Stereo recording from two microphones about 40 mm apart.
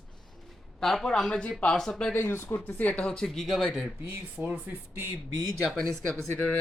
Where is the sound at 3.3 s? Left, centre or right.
Centre.